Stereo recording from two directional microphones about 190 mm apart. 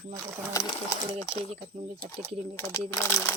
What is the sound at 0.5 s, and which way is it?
Speech, 20° left (ahead or behind).